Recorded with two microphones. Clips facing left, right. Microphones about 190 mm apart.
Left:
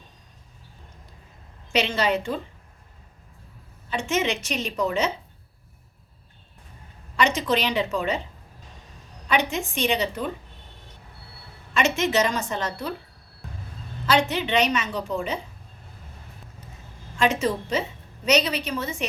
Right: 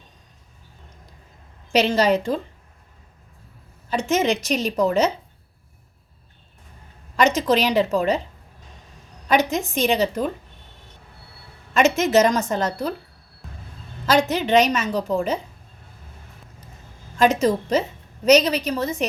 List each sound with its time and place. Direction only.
1.7 s a woman's voice: 40° right (ahead or behind)
3.8 s a woman's voice: 40° right (ahead or behind)
7.2 s a woman's voice: 40° right (ahead or behind)
9.3 s a woman's voice: 40° right (ahead or behind)
11.7 s a woman's voice: 40° right (ahead or behind)
14.1 s a woman's voice: 40° right (ahead or behind)
17.2 s a woman's voice: 40° right (ahead or behind)